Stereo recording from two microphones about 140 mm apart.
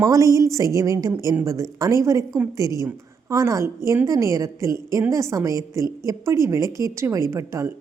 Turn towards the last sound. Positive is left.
turn(degrees=-20)  # may be behind; listen again after turning